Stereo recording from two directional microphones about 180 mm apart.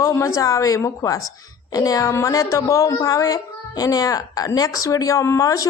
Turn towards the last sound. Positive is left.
turn(degrees=20)  # may be behind; listen again after turning